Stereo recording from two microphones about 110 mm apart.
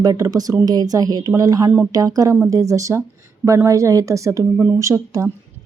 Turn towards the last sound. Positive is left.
turn(degrees=-30)  # may be behind; listen again after turning